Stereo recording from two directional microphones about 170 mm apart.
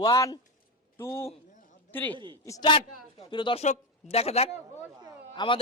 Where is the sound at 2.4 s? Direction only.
20° left (ahead or behind).